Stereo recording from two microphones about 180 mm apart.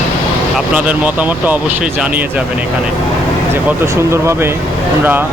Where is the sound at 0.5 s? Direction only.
5° right (ahead or behind).